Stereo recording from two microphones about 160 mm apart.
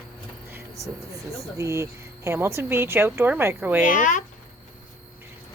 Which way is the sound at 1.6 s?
20° right (ahead or behind).